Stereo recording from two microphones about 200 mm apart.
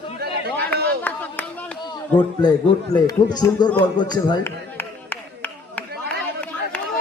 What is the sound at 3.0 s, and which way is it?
Speech, 20° left (ahead or behind).